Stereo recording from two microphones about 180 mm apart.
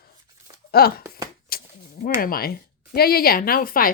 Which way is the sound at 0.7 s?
55° left (ahead or behind).